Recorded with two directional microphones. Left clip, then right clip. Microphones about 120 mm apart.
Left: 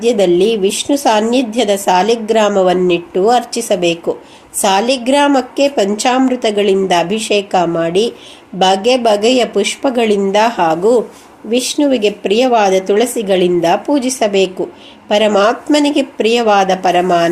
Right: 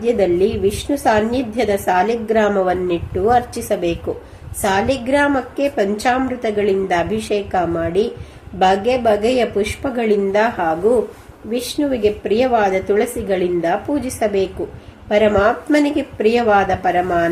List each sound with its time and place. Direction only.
0.0 s a woman's voice: 35° left (ahead or behind)
11.8 s a woman's voice: 35° left (ahead or behind)